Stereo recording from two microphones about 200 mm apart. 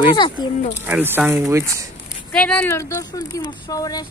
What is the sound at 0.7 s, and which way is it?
Speech, 10° right (ahead or behind).